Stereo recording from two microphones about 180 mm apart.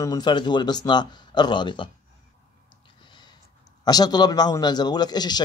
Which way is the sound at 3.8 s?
20° left (ahead or behind).